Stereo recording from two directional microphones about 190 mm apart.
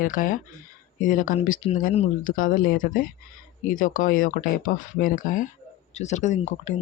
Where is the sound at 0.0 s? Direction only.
45° left (ahead or behind).